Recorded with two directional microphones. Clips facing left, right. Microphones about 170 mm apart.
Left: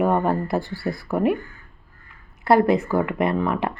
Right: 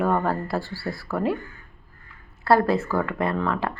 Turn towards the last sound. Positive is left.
turn(degrees=20)  # may be behind; listen again after turning